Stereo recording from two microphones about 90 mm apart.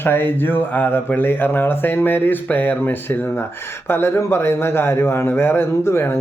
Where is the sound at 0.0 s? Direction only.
25° left (ahead or behind).